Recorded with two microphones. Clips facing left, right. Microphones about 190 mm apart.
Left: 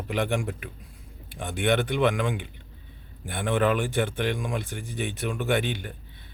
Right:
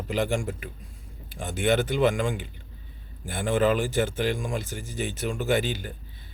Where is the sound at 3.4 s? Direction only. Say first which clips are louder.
Right 1 dB; 60° left (ahead or behind).